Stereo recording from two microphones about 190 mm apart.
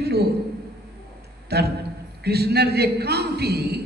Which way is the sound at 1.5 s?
60° right (ahead or behind).